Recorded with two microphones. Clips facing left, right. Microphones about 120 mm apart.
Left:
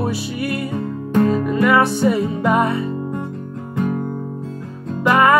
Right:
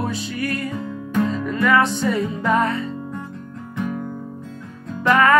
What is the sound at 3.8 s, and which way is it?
Music, 45° left (ahead or behind).